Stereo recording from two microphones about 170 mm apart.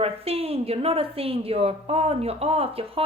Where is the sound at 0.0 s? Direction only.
35° right (ahead or behind).